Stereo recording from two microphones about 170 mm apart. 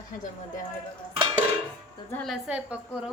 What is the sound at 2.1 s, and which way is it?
Speech, centre (ahead or behind).